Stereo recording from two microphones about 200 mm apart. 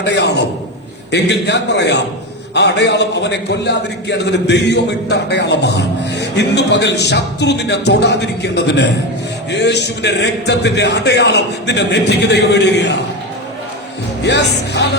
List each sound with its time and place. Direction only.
0.0 s a man's voice: 60° left (ahead or behind)
14.2 s a man's voice: 60° left (ahead or behind)